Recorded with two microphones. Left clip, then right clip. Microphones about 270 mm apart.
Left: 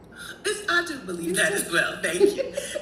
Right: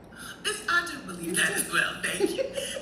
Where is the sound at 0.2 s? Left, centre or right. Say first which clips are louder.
Left 3 dB; centre.